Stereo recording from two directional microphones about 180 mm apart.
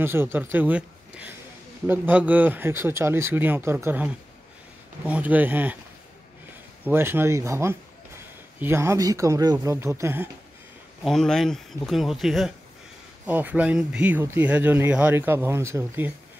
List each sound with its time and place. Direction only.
0.0 s speech: 10° right (ahead or behind)
6.8 s speech: 10° right (ahead or behind)
11.1 s speech: centre (ahead or behind); by 16.1 s 15° right (ahead or behind)